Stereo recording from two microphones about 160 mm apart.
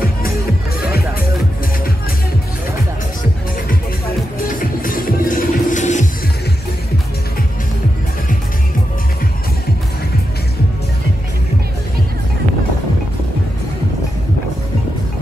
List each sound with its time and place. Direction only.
4.6 s music: 60° left (ahead or behind)